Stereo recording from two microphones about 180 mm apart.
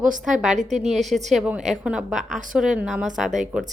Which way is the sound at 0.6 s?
40° right (ahead or behind).